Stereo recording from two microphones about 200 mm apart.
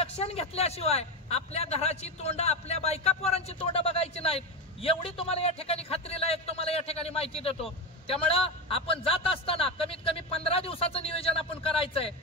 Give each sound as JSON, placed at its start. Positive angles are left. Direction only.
{"t": 0.0, "sound": "a man's voice", "side_deg": 30}